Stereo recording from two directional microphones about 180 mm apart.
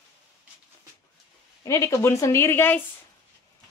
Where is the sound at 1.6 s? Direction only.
15° left (ahead or behind).